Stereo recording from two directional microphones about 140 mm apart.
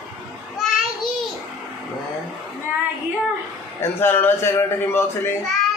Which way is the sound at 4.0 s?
15° left (ahead or behind).